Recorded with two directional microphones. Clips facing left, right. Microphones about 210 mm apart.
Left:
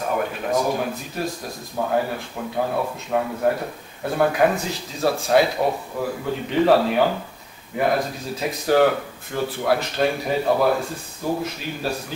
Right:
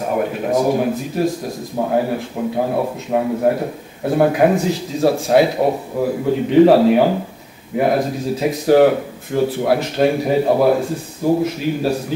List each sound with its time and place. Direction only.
0.0 s speech: 10° right (ahead or behind)
0.5 s a man's voice: 20° right (ahead or behind)